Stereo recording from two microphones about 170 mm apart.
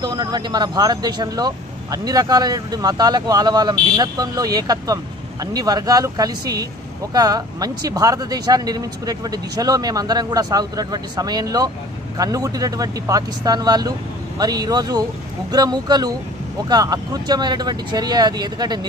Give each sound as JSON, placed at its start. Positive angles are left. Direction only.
{"t": 0.0, "sound": "speech", "side_deg": -25}